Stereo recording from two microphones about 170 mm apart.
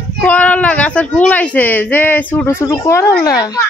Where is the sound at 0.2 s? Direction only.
10° left (ahead or behind).